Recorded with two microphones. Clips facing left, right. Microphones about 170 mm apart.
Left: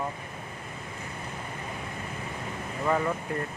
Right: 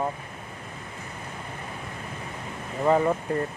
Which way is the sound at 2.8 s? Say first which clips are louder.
Right 6 dB; 30° right (ahead or behind).